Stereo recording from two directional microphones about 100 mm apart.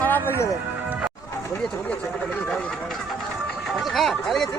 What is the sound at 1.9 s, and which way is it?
Speech, 15° left (ahead or behind).